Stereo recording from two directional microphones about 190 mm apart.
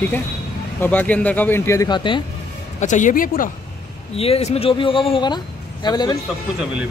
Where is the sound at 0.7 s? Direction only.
10° left (ahead or behind); by 2.2 s 25° left (ahead or behind).